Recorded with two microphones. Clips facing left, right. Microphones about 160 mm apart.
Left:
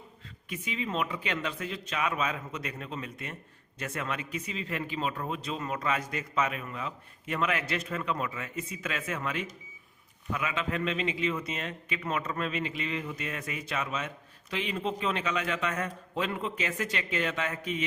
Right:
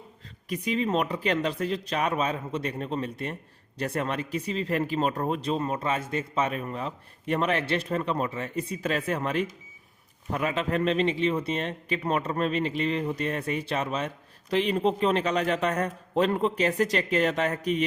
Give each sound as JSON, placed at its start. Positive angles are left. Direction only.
{"t": 0.4, "sound": "speech", "side_deg": -40}